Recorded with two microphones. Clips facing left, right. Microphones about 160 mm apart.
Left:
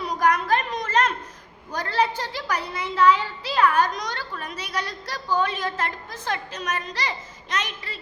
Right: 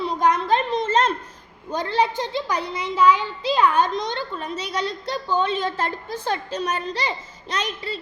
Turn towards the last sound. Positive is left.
turn(degrees=-30)  # may be behind; listen again after turning